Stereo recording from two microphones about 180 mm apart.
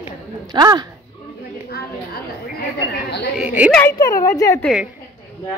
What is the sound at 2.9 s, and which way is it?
Speech, 70° left (ahead or behind).